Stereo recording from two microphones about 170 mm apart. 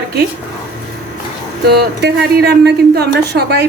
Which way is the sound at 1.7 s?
75° right (ahead or behind).